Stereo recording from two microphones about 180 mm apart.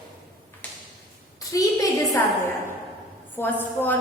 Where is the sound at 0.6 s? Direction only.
10° left (ahead or behind).